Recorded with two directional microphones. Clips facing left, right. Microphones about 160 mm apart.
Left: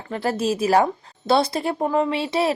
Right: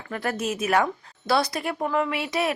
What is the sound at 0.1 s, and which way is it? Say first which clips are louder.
A woman's voice: left 5 dB; 30° left (ahead or behind).